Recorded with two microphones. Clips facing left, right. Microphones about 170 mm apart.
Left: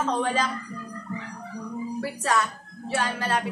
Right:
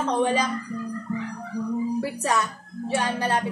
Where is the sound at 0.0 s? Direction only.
15° right (ahead or behind).